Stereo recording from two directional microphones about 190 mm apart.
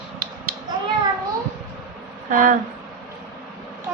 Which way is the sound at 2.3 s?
45° right (ahead or behind).